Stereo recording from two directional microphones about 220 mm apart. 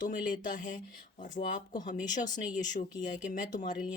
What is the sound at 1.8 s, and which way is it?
Speech, 35° left (ahead or behind).